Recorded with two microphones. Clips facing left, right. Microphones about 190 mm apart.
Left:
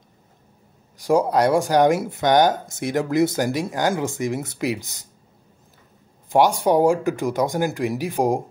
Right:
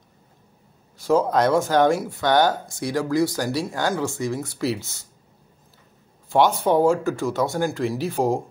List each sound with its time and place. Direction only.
0.9 s speech: 15° left (ahead or behind)
6.3 s speech: 15° left (ahead or behind)